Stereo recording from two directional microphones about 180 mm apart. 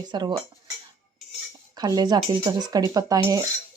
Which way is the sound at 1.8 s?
20° right (ahead or behind).